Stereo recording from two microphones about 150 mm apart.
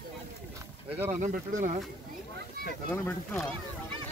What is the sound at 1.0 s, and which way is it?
Speech, 55° right (ahead or behind).